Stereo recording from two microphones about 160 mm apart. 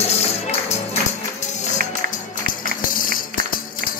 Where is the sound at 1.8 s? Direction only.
65° right (ahead or behind).